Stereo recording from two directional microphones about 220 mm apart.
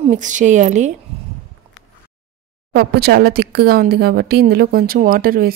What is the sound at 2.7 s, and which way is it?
Speech, 45° right (ahead or behind).